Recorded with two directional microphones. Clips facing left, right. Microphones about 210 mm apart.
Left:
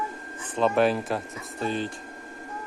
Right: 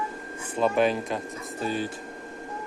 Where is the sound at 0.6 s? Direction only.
Centre (ahead or behind).